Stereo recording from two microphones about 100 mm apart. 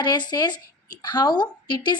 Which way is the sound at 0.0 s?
45° left (ahead or behind).